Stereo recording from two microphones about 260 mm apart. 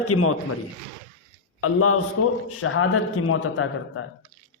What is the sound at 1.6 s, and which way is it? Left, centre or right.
A man's voice, left.